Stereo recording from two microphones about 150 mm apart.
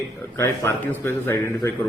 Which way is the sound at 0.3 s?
15° left (ahead or behind).